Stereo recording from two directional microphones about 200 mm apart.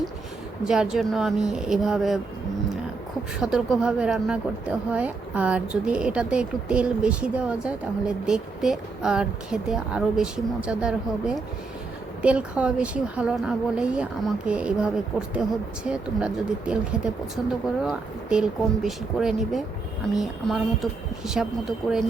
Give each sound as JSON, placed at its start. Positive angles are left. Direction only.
{"t": 0.6, "sound": "speech", "side_deg": -5}
{"t": 3.4, "sound": "speech", "side_deg": -5}
{"t": 21.8, "sound": "speech", "side_deg": 20}